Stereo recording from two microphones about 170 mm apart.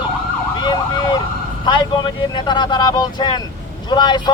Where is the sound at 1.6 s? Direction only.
25° left (ahead or behind).